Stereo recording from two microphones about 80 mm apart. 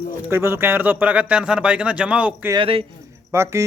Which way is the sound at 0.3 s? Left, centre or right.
Right.